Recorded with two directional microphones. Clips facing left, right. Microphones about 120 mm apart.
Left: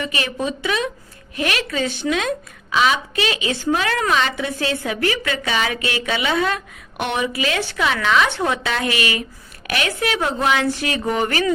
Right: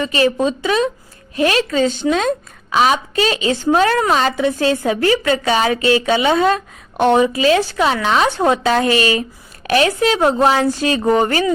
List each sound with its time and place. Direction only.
0.0 s a woman's voice: 30° right (ahead or behind)